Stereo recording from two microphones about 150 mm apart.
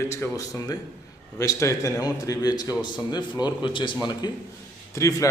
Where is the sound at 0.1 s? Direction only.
20° left (ahead or behind).